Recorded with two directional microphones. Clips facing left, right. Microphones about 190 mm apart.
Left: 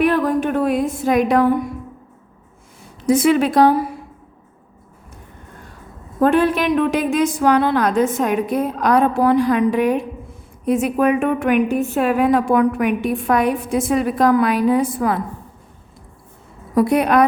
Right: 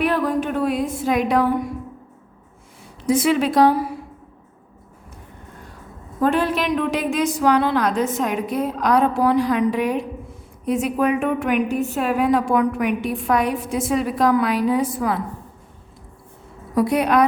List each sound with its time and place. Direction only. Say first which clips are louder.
0.0 s a sound: left 4 dB; 50° left (ahead or behind)
3.1 s a woman's voice: left 3 dB; 50° left (ahead or behind)
6.1 s a woman's voice: left 4 dB; 55° left (ahead or behind)
16.7 s a woman's voice: left 3 dB; 55° left (ahead or behind)